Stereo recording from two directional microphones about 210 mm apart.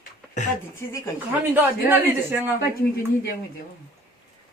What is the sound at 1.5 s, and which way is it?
A man's voice, 10° right (ahead or behind).